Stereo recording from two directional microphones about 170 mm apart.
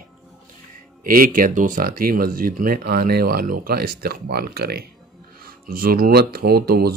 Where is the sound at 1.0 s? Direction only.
55° right (ahead or behind).